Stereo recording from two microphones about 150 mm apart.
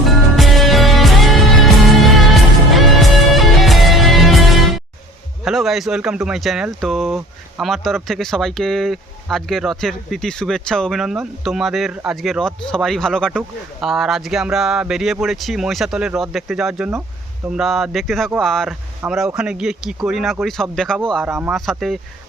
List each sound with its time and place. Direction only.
0.0 s music: centre (ahead or behind)
5.5 s speech: centre (ahead or behind)
21.2 s speech: 15° right (ahead or behind)
21.5 s speech: centre (ahead or behind)